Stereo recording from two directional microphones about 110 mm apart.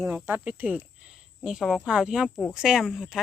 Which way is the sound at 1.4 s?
5° right (ahead or behind).